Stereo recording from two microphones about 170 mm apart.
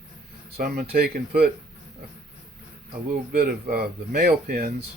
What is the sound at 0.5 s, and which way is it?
Speech, 60° right (ahead or behind).